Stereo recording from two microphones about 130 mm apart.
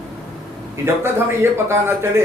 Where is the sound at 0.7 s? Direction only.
20° right (ahead or behind).